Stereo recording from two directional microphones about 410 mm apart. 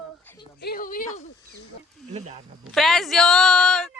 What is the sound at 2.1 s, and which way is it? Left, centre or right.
Speech, centre.